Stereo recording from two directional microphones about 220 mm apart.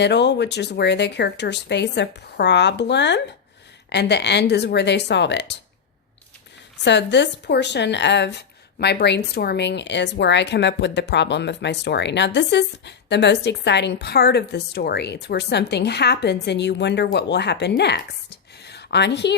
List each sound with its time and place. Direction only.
0.0 s a woman's voice: 50° left (ahead or behind)
6.8 s a woman's voice: 55° left (ahead or behind)